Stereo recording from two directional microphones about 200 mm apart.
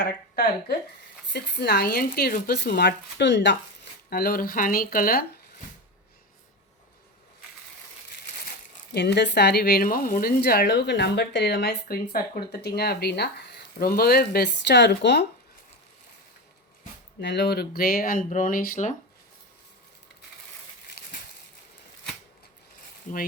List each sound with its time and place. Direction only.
0.0 s speech: 50° left (ahead or behind)
4.1 s speech: 50° left (ahead or behind)
8.9 s speech: 55° left (ahead or behind)
17.2 s speech: 55° left (ahead or behind); by 18.9 s 40° left (ahead or behind)
23.1 s speech: 40° left (ahead or behind)